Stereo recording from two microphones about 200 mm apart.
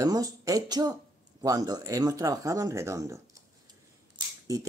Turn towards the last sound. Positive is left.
turn(degrees=-15)  # may be behind; listen again after turning